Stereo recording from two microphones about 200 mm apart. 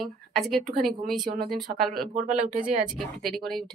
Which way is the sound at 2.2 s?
40° right (ahead or behind).